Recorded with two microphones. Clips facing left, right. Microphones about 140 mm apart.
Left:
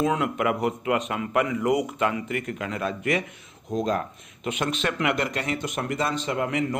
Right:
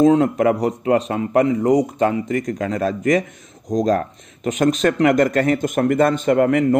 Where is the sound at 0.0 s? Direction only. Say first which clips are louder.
Right 10 dB; 35° right (ahead or behind).